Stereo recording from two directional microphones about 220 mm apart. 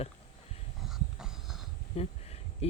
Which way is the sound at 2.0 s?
25° left (ahead or behind).